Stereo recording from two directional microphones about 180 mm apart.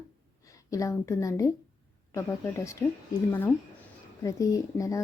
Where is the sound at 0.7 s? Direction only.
15° left (ahead or behind).